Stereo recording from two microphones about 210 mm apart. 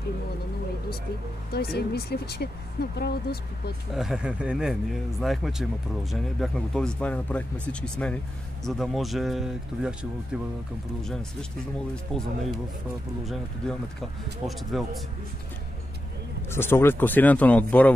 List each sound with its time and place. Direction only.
1.5 s speech: 50° left (ahead or behind)
3.9 s speech: centre (ahead or behind)
11.9 s speech: centre (ahead or behind)
16.4 s speech: 10° left (ahead or behind)